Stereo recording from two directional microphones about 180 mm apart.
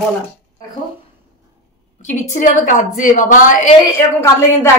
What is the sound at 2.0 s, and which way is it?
A woman's voice, 45° left (ahead or behind).